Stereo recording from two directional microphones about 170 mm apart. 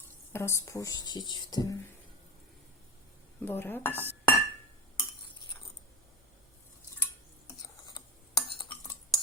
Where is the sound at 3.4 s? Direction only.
10° left (ahead or behind).